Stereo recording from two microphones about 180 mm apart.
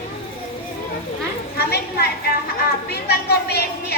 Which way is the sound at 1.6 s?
60° left (ahead or behind).